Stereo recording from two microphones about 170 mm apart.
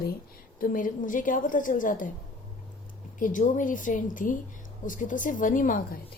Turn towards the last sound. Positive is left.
turn(degrees=50)  # may be behind; listen again after turning